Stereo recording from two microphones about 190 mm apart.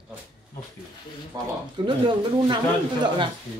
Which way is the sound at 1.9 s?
25° right (ahead or behind).